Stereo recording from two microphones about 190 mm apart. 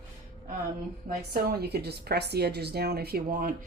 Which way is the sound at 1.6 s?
60° right (ahead or behind).